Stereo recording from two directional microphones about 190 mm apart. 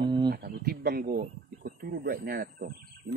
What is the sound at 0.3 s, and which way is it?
Speech, 55° right (ahead or behind).